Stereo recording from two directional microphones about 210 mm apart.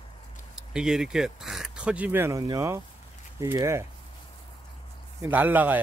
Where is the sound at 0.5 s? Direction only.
5° right (ahead or behind).